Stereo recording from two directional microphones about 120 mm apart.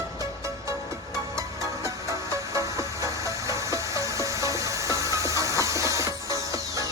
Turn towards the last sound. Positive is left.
turn(degrees=-25)  # may be behind; listen again after turning